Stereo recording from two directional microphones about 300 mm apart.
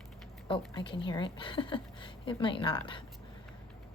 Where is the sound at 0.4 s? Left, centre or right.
Centre.